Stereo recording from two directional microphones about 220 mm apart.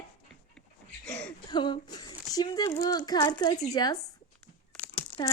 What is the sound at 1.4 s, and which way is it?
A woman's voice, 20° left (ahead or behind).